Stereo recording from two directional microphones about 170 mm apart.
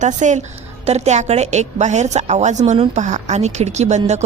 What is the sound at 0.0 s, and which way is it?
A woman's voice, 45° right (ahead or behind).